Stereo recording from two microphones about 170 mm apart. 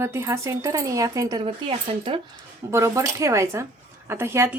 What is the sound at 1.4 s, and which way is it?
Speech, 35° right (ahead or behind).